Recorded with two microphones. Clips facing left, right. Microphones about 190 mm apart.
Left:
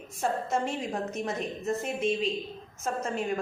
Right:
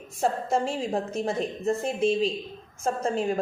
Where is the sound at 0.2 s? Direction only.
35° right (ahead or behind).